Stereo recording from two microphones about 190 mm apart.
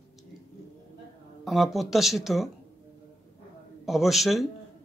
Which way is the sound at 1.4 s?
Centre (ahead or behind).